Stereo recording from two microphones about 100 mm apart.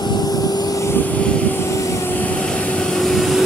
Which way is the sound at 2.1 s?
15° left (ahead or behind).